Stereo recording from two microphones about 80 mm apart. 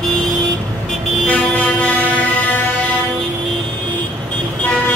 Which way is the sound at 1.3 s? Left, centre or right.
Centre.